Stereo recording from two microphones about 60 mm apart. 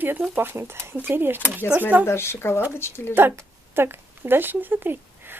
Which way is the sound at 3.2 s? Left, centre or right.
Right.